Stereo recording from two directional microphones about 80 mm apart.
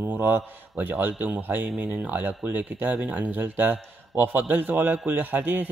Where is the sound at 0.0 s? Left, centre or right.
Right.